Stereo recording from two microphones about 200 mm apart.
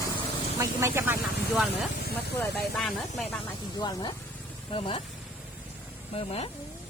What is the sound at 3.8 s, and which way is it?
Speech, 20° left (ahead or behind).